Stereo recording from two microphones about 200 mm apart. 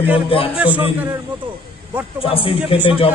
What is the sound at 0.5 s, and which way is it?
Speech, 10° right (ahead or behind).